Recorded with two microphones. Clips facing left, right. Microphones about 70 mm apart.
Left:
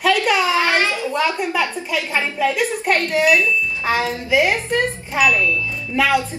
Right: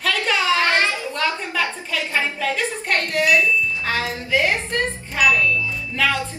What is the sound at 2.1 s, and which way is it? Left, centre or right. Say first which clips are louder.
A woman's voice: left 3 dB; centre.